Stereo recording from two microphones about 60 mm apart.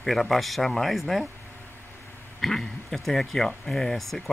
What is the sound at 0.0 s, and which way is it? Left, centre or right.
Speech, centre.